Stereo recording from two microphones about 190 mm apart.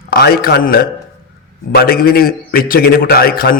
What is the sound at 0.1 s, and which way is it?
A man's voice, 50° left (ahead or behind).